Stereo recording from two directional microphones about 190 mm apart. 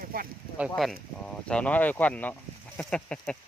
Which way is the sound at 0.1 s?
50° right (ahead or behind).